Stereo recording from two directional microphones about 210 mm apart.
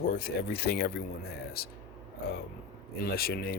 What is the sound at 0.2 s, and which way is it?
Speech, 45° left (ahead or behind).